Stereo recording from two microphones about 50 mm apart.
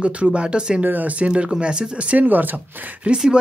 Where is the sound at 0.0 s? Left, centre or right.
Right.